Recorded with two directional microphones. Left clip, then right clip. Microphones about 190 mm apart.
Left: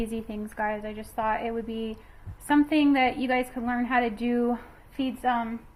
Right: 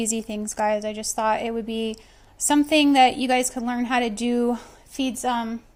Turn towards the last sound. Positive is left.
turn(degrees=-65)  # may be behind; listen again after turning